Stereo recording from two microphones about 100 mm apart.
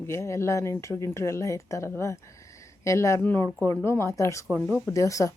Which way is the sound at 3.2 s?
20° left (ahead or behind).